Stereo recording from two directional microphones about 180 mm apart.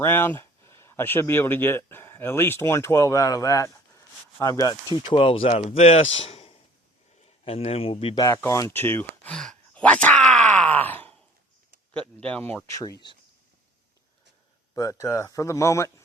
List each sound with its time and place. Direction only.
0.0 s speech: 10° left (ahead or behind); by 8.2 s 30° left (ahead or behind)
8.2 s a sound: 15° left (ahead or behind)
11.9 s speech: 5° left (ahead or behind); by 13.1 s 25° left (ahead or behind)
14.8 s speech: 15° left (ahead or behind)